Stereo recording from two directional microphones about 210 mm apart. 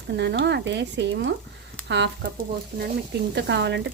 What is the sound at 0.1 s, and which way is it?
Speech, 55° right (ahead or behind).